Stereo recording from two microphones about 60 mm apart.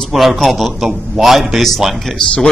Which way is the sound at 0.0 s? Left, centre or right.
Centre.